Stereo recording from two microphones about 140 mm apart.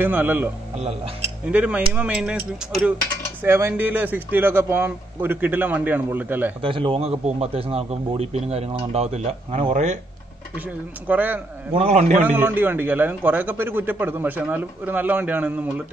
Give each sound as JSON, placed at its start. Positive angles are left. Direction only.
{"t": 0.0, "sound": "speech", "side_deg": -15}
{"t": 0.7, "sound": "a man's voice", "side_deg": -45}
{"t": 1.5, "sound": "speech", "side_deg": -10}
{"t": 3.4, "sound": "speech", "side_deg": -15}
{"t": 6.6, "sound": "a man's voice", "side_deg": -40}
{"t": 10.5, "sound": "speech", "side_deg": -10}
{"t": 11.7, "sound": "a man's voice", "side_deg": -50}
{"t": 12.4, "sound": "speech", "side_deg": -15}